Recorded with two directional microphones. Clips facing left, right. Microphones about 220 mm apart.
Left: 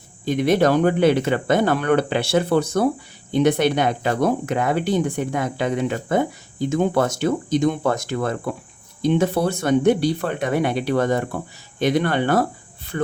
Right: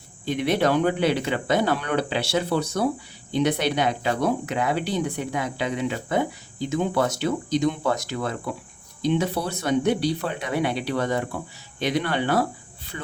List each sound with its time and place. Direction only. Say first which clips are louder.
0.3 s speech: left 5 dB; 45° left (ahead or behind)